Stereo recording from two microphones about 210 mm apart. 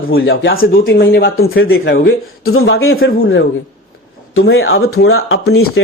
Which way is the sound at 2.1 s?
80° left.